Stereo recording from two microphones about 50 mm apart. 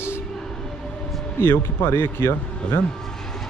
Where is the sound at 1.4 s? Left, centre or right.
Left.